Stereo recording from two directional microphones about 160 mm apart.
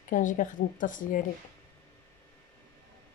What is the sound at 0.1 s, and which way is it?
A woman's voice, 55° left (ahead or behind).